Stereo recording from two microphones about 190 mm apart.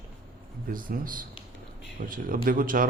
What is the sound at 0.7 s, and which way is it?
A man's voice, 45° right (ahead or behind).